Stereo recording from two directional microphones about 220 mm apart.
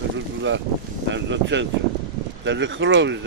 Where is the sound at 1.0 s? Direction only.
55° right (ahead or behind).